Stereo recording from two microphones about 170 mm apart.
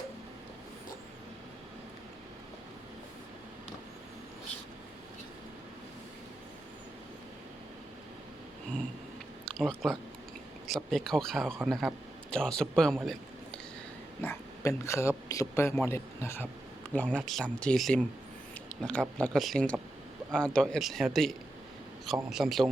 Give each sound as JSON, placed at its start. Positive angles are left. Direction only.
{"t": 9.6, "sound": "speech", "side_deg": 5}
{"t": 10.9, "sound": "speech", "side_deg": 0}
{"t": 14.2, "sound": "speech", "side_deg": 15}